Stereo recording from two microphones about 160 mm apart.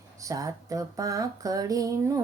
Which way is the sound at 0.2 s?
20° right (ahead or behind).